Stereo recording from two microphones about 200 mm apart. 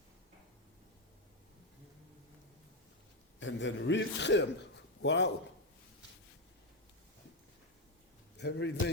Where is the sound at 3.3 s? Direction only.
65° left (ahead or behind).